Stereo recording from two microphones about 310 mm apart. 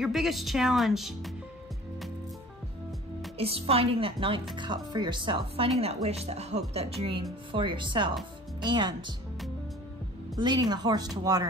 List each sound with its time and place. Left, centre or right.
0.0 s speech: centre
3.3 s speech: centre
10.3 s speech: centre